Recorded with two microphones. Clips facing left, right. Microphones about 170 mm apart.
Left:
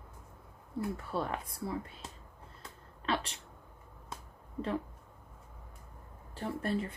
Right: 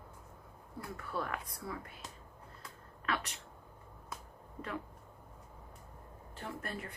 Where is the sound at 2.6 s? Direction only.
30° left (ahead or behind).